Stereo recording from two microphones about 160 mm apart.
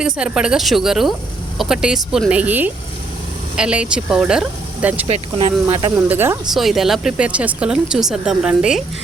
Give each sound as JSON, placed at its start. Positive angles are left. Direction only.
{"t": 0.0, "sound": "speech", "side_deg": -5}
{"t": 5.0, "sound": "speech", "side_deg": -40}
{"t": 5.6, "sound": "speech", "side_deg": -20}
{"t": 6.0, "sound": "speech", "side_deg": -10}
{"t": 6.5, "sound": "speech", "side_deg": 0}